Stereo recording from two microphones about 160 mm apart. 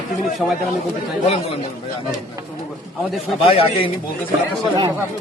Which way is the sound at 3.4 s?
35° left (ahead or behind).